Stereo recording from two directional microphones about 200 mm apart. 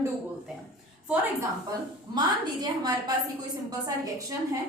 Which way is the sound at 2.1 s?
20° right (ahead or behind).